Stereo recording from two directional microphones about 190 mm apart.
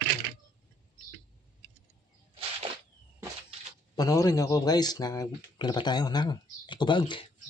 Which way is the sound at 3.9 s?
20° left (ahead or behind).